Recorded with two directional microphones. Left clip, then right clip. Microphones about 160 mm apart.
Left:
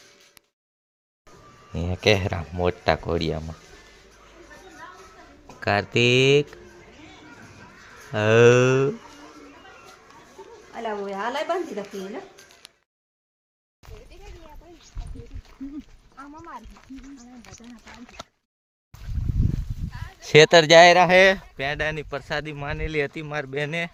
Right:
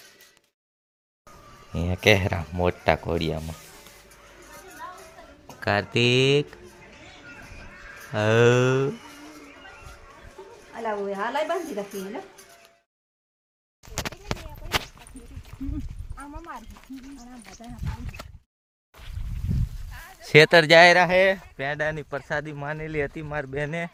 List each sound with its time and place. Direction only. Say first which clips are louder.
1.7 s speech: right 1 dB; 5° right (ahead or behind)
5.5 s speech: left 2 dB; 5° left (ahead or behind)
8.1 s speech: left 4 dB; 5° left (ahead or behind)
10.4 s a sound: even; 55° right (ahead or behind)
10.8 s a woman's voice: even; 60° left (ahead or behind)
13.8 s a sound: even; 15° left (ahead or behind)
16.1 s horse: right 1 dB; 10° right (ahead or behind)
17.4 s speech: right 3 dB; 35° right (ahead or behind)
20.2 s speech: left 1 dB; 10° left (ahead or behind)
21.1 s speech: left 4 dB; 90° left
21.6 s speech: left 1 dB; 10° left (ahead or behind)